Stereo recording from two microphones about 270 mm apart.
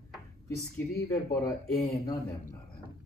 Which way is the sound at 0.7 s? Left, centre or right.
Centre.